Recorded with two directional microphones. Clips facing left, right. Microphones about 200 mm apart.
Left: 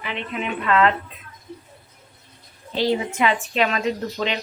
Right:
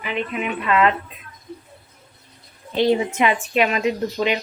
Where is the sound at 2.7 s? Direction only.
20° right (ahead or behind).